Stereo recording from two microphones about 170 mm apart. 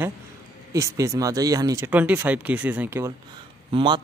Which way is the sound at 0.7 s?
20° right (ahead or behind).